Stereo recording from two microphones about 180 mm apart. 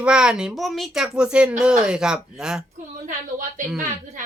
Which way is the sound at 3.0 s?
45° right (ahead or behind).